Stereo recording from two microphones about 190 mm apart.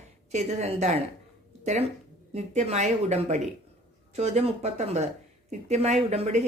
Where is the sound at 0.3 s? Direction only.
35° right (ahead or behind).